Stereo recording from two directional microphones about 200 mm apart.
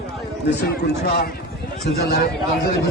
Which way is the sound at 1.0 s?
50° left (ahead or behind).